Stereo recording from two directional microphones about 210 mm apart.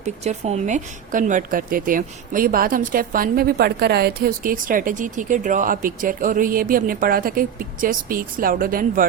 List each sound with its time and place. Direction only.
0.0 s speech: 30° right (ahead or behind)